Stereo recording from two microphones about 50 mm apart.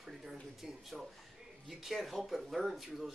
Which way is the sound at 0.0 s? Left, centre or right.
Centre.